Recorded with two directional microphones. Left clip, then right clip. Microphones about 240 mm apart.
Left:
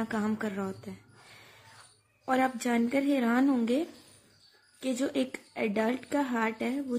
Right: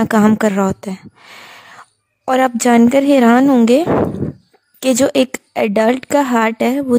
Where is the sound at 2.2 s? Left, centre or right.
Right.